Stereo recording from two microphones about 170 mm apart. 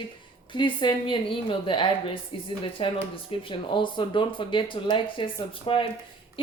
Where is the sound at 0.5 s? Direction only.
30° left (ahead or behind).